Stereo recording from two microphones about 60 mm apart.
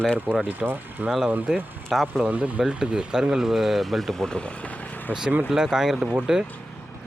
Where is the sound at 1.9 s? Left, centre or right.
Centre.